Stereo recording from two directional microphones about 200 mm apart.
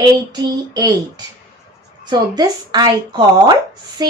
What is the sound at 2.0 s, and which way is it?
Speech, 20° right (ahead or behind).